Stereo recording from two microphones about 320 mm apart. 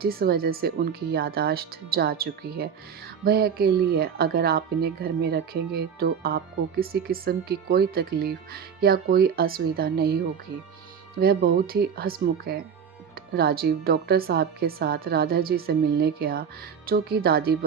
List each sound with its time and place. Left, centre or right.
0.0 s speech: right
11.2 s speech: right